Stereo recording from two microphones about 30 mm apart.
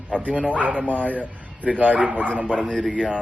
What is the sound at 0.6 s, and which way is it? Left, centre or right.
Speech, right.